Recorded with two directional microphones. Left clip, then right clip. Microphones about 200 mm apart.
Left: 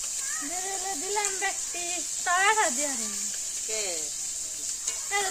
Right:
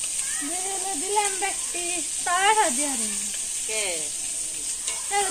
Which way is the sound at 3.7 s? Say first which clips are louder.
Right 4 dB; 50° left (ahead or behind).